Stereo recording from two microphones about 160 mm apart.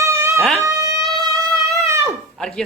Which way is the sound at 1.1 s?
20° right (ahead or behind).